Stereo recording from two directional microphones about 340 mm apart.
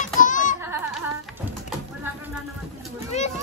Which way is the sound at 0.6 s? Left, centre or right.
Centre.